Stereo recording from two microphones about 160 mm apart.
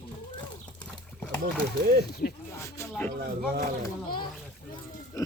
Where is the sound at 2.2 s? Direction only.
70° left (ahead or behind).